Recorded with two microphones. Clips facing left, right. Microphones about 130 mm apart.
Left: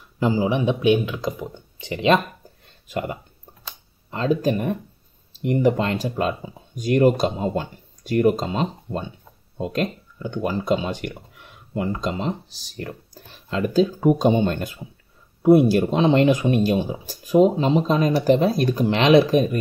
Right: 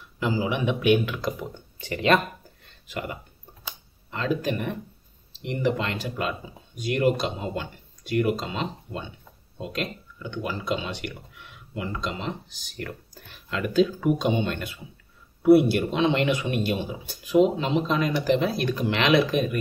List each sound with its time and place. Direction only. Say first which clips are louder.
0.2 s speech: left 5 dB; 35° left (ahead or behind)
2.9 s speech: left 6 dB; 35° left (ahead or behind)